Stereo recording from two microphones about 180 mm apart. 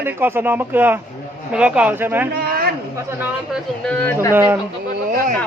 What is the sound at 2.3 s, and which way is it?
Speech, 55° right (ahead or behind).